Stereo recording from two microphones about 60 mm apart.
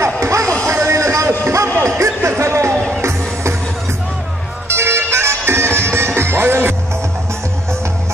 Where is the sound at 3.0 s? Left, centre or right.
Right.